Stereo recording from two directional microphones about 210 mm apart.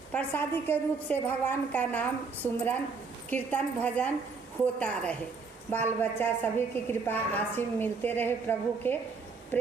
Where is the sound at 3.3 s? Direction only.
5° left (ahead or behind).